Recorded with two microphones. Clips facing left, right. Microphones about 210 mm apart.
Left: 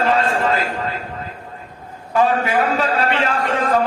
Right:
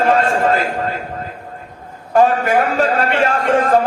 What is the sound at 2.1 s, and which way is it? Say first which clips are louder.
Speech: right 4 dB; 45° right (ahead or behind).